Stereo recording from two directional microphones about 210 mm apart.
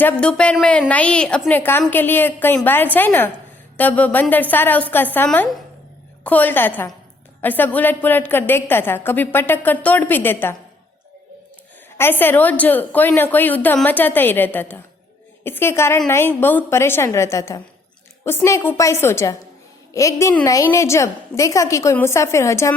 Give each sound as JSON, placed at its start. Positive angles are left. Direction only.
{"t": 0.0, "sound": "a woman's voice", "side_deg": 5}
{"t": 11.9, "sound": "a woman's voice", "side_deg": 10}